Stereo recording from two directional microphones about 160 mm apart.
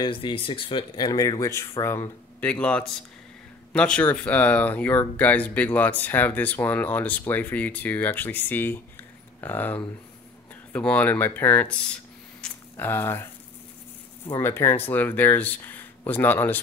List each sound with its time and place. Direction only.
0.0 s speech: 30° left (ahead or behind); by 11.7 s 10° left (ahead or behind)
12.4 s a sound: 10° left (ahead or behind)
14.4 s speech: 15° left (ahead or behind)